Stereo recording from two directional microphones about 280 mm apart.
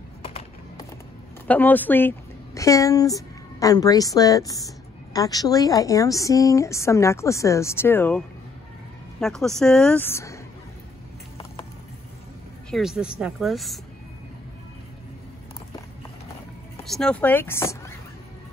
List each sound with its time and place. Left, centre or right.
0.2 s horse: centre
1.5 s a woman's voice: centre
9.2 s speech: centre
12.7 s speech: centre
16.8 s speech: centre